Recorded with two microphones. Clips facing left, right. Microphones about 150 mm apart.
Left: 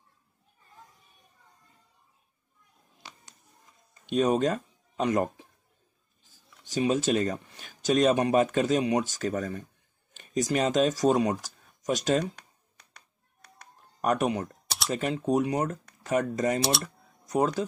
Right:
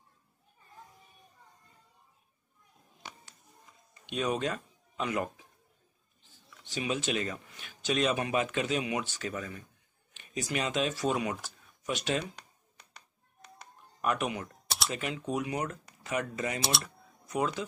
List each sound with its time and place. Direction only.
3.9 s speech: 40° left (ahead or behind)
14.0 s speech: 40° left (ahead or behind)
16.5 s speech: centre (ahead or behind)
16.8 s a sound: 40° left (ahead or behind)